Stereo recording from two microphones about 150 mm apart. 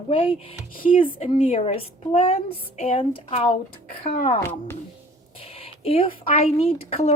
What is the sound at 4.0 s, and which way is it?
Speech, 65° left (ahead or behind).